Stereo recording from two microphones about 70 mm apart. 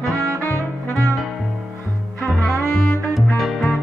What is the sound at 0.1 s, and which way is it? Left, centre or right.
Brass instrument, right.